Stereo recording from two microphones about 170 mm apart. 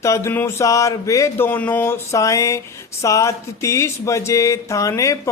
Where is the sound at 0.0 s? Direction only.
15° left (ahead or behind).